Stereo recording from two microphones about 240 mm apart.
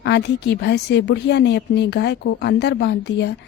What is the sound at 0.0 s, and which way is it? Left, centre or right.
A woman's voice, left.